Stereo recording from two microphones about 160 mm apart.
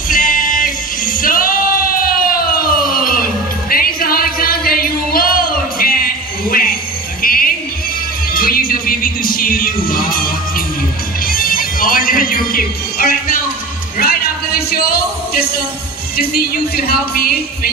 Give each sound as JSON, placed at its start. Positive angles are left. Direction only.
{"t": 0.1, "sound": "female singing", "side_deg": 60}
{"t": 3.7, "sound": "a sound", "side_deg": 65}
{"t": 7.2, "sound": "music", "side_deg": 65}
{"t": 16.2, "sound": "speech", "side_deg": 70}